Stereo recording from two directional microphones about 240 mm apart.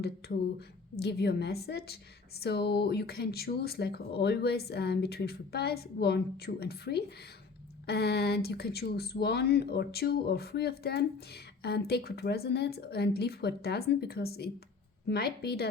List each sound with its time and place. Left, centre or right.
0.2 s speech: left